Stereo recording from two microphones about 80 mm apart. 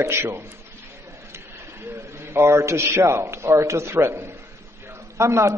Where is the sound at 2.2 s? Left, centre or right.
Right.